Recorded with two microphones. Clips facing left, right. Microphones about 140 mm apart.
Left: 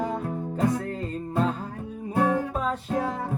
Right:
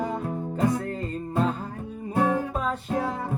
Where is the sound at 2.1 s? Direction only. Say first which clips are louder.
Even; 25° right (ahead or behind).